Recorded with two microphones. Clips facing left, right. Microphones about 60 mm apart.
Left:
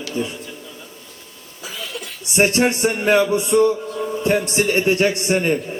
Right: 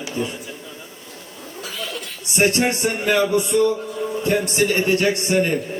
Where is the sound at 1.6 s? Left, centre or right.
Centre.